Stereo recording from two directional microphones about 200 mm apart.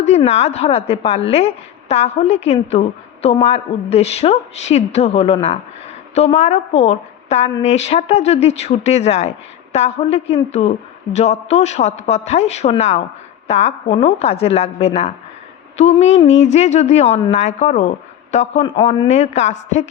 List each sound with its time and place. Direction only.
0.3 s a woman's voice: 35° left (ahead or behind)